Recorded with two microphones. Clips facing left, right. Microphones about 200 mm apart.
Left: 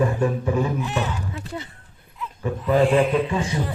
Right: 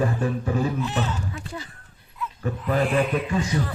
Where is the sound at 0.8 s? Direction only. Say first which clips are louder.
Left 1 dB; 15° left (ahead or behind).